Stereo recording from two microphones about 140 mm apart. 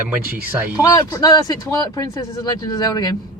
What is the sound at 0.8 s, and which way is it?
Speech, 25° left (ahead or behind).